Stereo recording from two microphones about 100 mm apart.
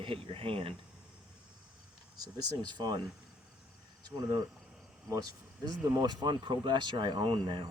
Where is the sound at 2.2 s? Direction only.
40° right (ahead or behind).